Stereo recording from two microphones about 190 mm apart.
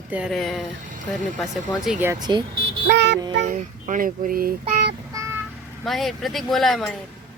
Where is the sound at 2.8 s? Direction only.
65° right (ahead or behind).